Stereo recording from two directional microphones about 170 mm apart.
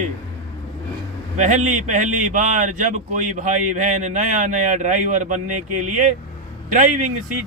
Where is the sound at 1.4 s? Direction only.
45° right (ahead or behind).